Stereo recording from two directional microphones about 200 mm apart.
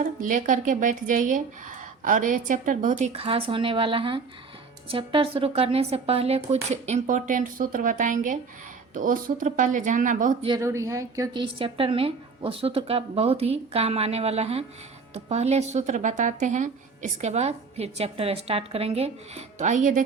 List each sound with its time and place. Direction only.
0.0 s a woman's voice: 40° right (ahead or behind)
10.4 s a woman's voice: 20° right (ahead or behind); by 20.0 s 40° right (ahead or behind)